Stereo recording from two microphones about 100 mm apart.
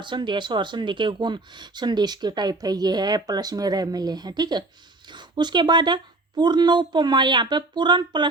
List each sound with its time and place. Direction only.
0.0 s speech: 50° right (ahead or behind)